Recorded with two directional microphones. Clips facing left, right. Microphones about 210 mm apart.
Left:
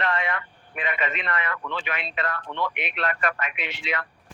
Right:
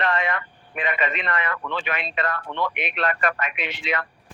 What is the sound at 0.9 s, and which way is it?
A man's voice, 65° right (ahead or behind).